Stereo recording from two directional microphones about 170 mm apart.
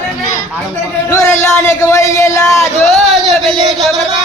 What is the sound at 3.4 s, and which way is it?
Speech, centre (ahead or behind).